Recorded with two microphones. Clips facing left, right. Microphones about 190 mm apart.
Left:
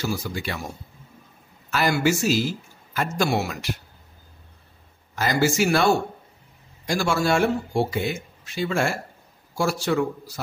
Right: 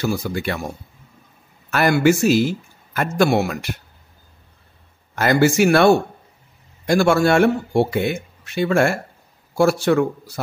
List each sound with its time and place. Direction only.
0.0 s speech: 55° right (ahead or behind)
1.7 s speech: 55° right (ahead or behind)
5.1 s speech: 60° right (ahead or behind)